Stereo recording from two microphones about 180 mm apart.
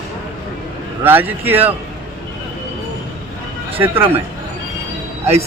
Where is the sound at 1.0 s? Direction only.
10° right (ahead or behind).